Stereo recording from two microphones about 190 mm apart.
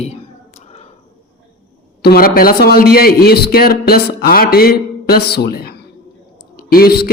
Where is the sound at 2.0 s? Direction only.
55° left (ahead or behind).